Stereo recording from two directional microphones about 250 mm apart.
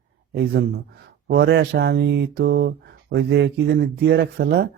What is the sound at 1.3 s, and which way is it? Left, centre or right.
Speech, right.